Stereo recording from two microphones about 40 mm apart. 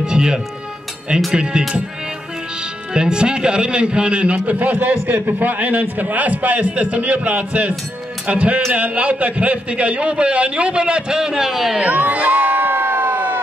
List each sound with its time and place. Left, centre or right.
0.0 s music: centre
1.3 s a man's voice: right
2.9 s a man's voice: right
11.8 s crowd: right